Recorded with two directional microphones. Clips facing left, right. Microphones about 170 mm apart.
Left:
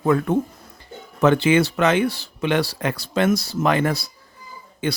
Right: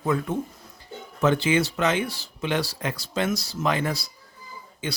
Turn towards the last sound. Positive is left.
turn(degrees=60)  # may be behind; listen again after turning